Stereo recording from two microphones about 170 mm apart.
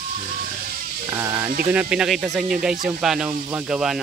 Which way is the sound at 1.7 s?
5° right (ahead or behind).